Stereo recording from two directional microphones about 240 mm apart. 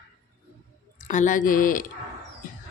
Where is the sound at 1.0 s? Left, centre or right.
Left.